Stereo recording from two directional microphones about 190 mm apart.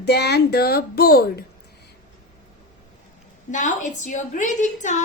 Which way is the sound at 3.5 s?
40° left (ahead or behind).